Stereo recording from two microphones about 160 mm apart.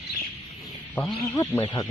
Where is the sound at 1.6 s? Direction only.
25° left (ahead or behind).